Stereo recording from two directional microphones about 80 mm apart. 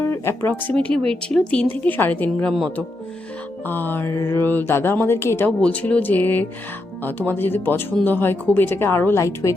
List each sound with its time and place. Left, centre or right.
0.0 s speech: left
3.7 s speech: left
4.1 s music: left
5.5 s speech: centre; by 9.2 s left
9.2 s music: left